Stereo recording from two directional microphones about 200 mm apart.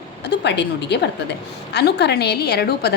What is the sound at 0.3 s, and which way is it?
A woman's voice, 60° left (ahead or behind).